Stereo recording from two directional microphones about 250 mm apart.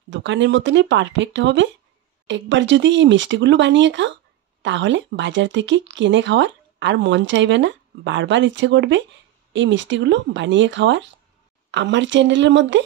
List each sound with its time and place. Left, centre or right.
0.1 s speech: right